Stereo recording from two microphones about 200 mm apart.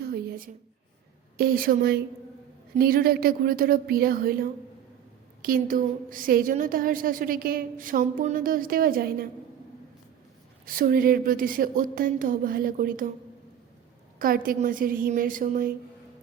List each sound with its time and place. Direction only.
0.1 s a sound: 45° right (ahead or behind)
1.4 s a woman's voice: 45° right (ahead or behind)
10.7 s a woman's voice: 45° right (ahead or behind)
14.2 s a woman's voice: 45° right (ahead or behind)